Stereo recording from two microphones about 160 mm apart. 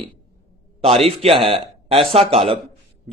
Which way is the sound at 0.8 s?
35° right (ahead or behind).